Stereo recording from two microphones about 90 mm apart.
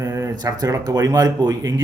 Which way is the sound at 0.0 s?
35° right (ahead or behind).